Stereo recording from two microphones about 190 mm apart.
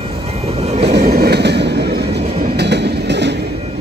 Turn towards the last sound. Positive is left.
turn(degrees=-65)  # may be behind; listen again after turning